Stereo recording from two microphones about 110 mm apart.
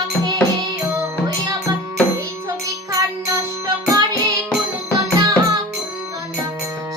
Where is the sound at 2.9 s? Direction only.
30° right (ahead or behind).